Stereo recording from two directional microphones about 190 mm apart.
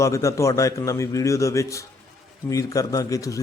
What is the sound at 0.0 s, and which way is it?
A man's voice, 15° left (ahead or behind).